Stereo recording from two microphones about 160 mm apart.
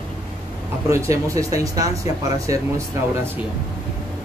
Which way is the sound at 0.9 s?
20° right (ahead or behind).